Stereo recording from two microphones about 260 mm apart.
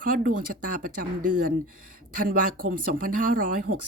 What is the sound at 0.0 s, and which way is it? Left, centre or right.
Speech, right.